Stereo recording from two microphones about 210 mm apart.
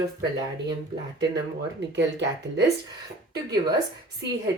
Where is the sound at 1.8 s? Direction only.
55° right (ahead or behind).